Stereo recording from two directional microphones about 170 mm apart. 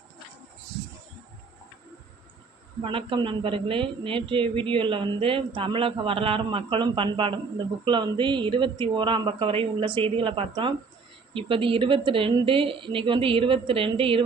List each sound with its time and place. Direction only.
2.8 s a man's voice: 30° right (ahead or behind)